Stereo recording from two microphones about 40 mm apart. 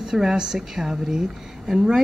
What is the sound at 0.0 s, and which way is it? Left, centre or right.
Speech, centre.